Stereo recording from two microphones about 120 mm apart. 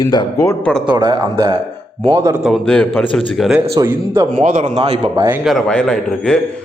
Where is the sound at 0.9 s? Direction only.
35° right (ahead or behind).